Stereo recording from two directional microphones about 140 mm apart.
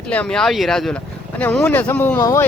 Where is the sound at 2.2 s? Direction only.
25° left (ahead or behind).